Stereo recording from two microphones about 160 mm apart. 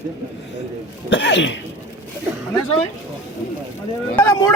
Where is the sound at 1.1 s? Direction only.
90° left.